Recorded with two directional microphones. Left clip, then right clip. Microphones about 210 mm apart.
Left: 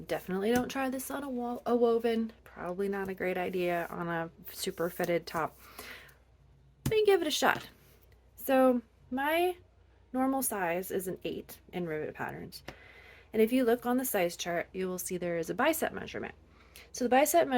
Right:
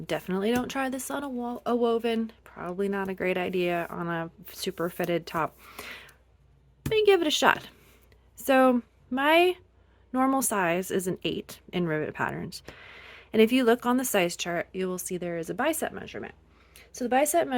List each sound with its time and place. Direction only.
0.1 s speech: 35° right (ahead or behind)
8.4 s a woman's voice: 45° right (ahead or behind); by 17.5 s 15° right (ahead or behind)